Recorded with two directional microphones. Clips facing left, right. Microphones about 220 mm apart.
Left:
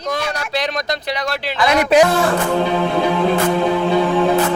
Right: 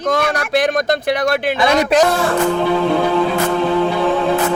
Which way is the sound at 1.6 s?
25° right (ahead or behind).